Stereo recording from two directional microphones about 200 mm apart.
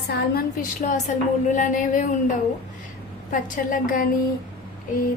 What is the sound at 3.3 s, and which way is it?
Speech, 45° left (ahead or behind).